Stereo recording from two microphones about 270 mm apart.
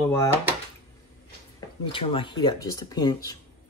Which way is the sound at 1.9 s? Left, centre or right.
Centre.